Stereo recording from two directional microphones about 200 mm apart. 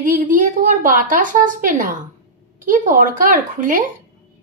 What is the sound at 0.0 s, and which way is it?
A woman's voice, 40° right (ahead or behind).